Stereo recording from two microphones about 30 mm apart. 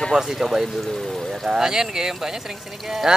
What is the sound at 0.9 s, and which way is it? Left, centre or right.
Pour, centre.